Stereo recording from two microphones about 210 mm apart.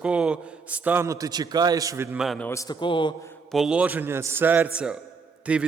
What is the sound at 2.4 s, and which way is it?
Speech, 15° left (ahead or behind).